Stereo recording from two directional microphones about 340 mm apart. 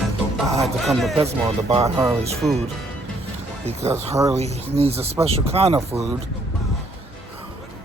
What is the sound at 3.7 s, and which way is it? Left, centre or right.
Speech, centre.